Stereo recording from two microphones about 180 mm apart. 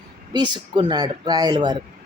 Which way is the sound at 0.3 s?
25° right (ahead or behind).